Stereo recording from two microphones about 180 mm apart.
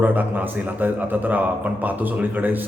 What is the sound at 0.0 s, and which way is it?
A man's voice, 10° right (ahead or behind).